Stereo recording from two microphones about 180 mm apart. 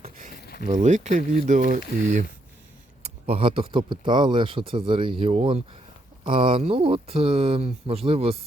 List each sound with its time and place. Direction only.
0.0 s a sound: 45° right (ahead or behind)
0.6 s speech: 40° right (ahead or behind)
3.0 s speech: 30° right (ahead or behind)